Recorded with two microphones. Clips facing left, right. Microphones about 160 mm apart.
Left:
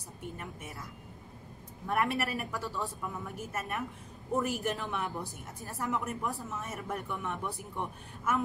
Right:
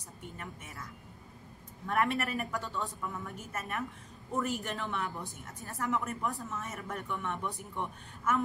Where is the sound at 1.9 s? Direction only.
5° left (ahead or behind).